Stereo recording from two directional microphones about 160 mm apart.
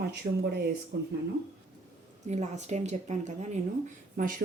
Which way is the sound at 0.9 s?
90° right.